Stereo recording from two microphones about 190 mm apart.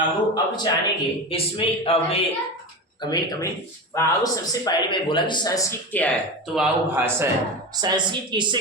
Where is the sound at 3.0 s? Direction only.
20° left (ahead or behind); by 7.3 s 10° right (ahead or behind).